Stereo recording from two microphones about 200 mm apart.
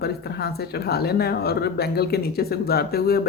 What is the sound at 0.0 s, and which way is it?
Speech, 50° left (ahead or behind).